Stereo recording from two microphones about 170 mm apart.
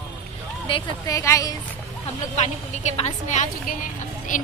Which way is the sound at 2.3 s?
40° left (ahead or behind).